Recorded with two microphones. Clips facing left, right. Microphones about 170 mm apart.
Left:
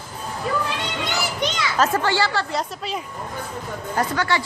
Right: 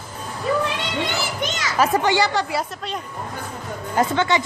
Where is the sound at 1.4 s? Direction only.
45° right (ahead or behind).